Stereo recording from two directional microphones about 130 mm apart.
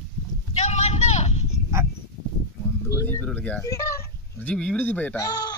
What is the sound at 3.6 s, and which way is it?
Speech, 25° left (ahead or behind).